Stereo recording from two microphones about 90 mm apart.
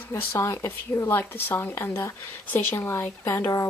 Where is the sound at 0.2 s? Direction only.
30° left (ahead or behind).